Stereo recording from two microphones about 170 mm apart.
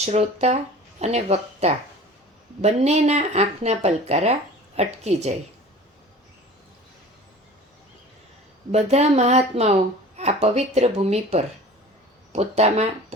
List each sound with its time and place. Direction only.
0.0 s speech: 40° right (ahead or behind)
8.7 s speech: 40° right (ahead or behind)